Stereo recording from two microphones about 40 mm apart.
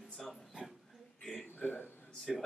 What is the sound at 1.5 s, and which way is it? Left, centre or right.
Speech, left.